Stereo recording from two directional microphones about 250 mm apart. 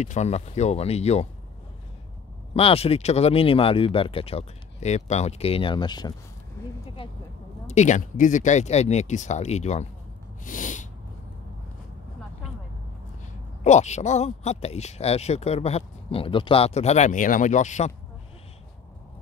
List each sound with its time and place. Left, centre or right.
0.0 s speech: left
2.5 s speech: left
7.6 s speech: left
10.4 s sneeze: left
13.7 s speech: left